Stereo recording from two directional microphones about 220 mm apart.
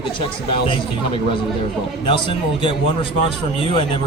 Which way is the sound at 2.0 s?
20° left (ahead or behind).